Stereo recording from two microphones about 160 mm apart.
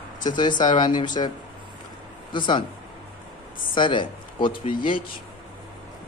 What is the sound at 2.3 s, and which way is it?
Speech, 30° left (ahead or behind).